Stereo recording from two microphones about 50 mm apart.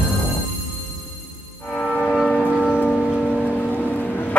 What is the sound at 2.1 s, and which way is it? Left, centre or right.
Church bell, centre.